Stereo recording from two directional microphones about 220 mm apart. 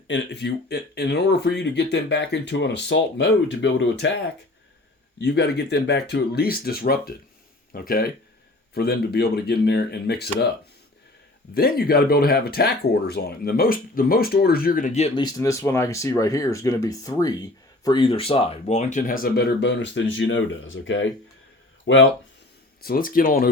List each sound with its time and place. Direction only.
0.1 s speech: 50° left (ahead or behind)
5.2 s speech: 50° left (ahead or behind)
11.5 s speech: 45° left (ahead or behind); by 22.0 s 60° left (ahead or behind)
22.8 s speech: 40° left (ahead or behind)